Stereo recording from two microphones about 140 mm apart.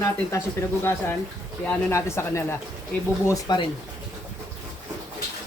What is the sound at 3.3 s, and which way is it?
Speech, 30° left (ahead or behind).